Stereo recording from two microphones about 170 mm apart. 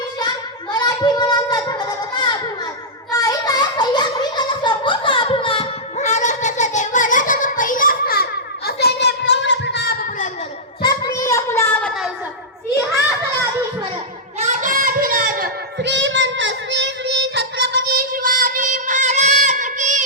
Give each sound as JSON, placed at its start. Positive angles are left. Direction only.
{"t": 0.7, "sound": "child singing", "side_deg": 25}
{"t": 3.1, "sound": "a sound", "side_deg": 20}
{"t": 10.8, "sound": "child singing", "side_deg": 20}
{"t": 14.3, "sound": "child singing", "side_deg": -45}
{"t": 15.8, "sound": "child singing", "side_deg": -90}